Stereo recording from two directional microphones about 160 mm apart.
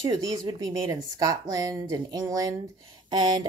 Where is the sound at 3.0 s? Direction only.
25° right (ahead or behind).